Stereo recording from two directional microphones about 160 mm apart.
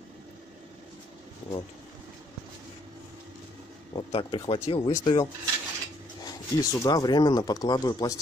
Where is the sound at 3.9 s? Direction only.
30° left (ahead or behind).